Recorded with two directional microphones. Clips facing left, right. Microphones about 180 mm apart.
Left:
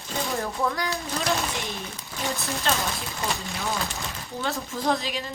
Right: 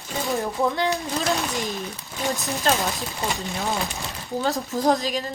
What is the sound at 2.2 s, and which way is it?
Speech, 15° right (ahead or behind).